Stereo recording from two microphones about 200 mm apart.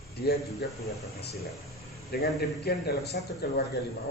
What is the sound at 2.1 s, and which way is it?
A man's voice, 50° left (ahead or behind).